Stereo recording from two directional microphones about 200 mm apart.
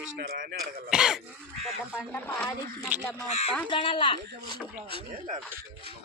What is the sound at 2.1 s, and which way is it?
Speech, 10° left (ahead or behind).